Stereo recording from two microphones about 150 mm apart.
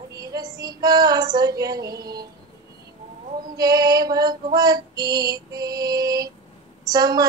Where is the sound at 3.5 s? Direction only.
25° right (ahead or behind).